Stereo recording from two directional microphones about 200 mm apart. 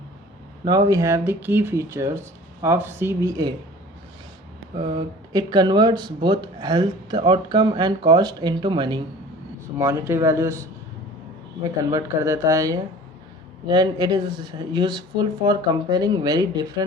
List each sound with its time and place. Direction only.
0.6 s speech: 20° right (ahead or behind)
4.8 s speech: 25° right (ahead or behind)
9.7 s speech: 10° right (ahead or behind)